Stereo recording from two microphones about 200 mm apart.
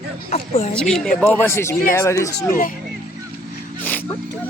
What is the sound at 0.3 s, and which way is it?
Speech, 35° left (ahead or behind).